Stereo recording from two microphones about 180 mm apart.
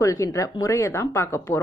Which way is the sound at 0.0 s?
15° left (ahead or behind).